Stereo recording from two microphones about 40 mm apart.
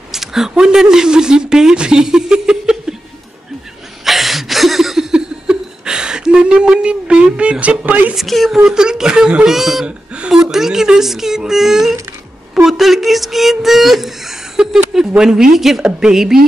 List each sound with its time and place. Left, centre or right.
0.1 s speech: centre
4.0 s a sound: centre
5.1 s a sound: right
7.3 s speech: right
8.5 s speech: centre
9.5 s speech: centre
9.8 s speech: right
10.3 s speech: centre